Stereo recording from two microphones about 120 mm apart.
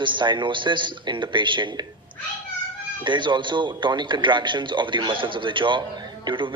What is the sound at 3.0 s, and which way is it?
A man's voice, 40° right (ahead or behind).